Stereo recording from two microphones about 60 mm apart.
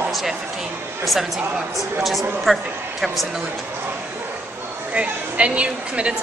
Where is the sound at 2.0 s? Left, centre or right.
Centre.